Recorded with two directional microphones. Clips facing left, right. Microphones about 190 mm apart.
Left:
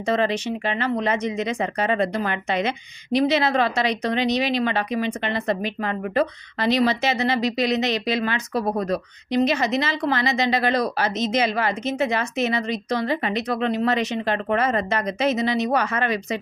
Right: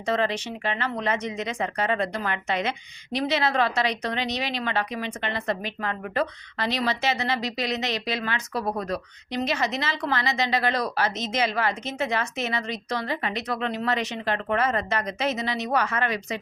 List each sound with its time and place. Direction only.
0.0 s speech: 20° left (ahead or behind)